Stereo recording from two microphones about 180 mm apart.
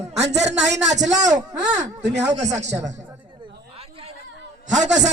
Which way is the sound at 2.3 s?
40° right (ahead or behind).